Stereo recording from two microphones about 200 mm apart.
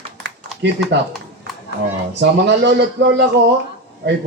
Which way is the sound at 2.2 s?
60° right (ahead or behind).